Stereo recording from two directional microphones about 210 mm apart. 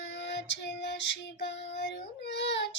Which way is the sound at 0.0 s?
55° left (ahead or behind).